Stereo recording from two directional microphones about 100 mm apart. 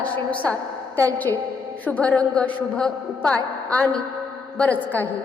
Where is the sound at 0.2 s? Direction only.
15° left (ahead or behind).